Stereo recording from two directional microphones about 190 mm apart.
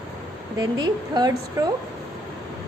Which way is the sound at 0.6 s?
20° right (ahead or behind).